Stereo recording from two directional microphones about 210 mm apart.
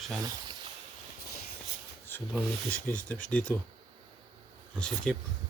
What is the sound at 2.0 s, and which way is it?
Speech, 10° left (ahead or behind).